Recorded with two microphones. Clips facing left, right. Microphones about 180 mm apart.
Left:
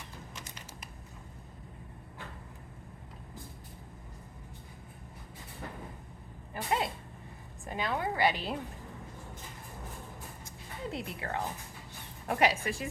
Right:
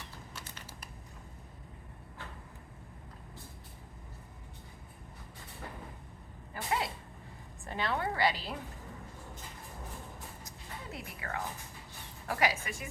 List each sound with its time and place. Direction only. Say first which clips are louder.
6.5 s a sound: left 2 dB; 20° left (ahead or behind)
7.7 s a woman's voice: left 1 dB; 10° left (ahead or behind)
10.9 s speech: left 3 dB; 25° left (ahead or behind)